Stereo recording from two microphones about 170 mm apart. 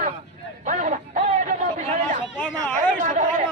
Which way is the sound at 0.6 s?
50° right (ahead or behind).